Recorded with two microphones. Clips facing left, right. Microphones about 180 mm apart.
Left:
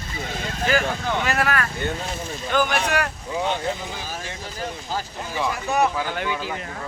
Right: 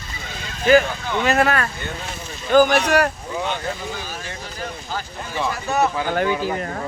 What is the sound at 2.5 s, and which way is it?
Speech, 40° right (ahead or behind).